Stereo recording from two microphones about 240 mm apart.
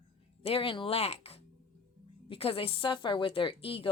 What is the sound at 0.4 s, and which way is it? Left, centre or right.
A woman's voice, left.